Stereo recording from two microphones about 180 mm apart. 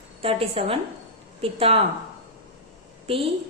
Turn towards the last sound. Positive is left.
turn(degrees=-30)  # may be behind; listen again after turning